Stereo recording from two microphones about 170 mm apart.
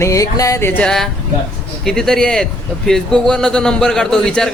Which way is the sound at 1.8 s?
5° left (ahead or behind).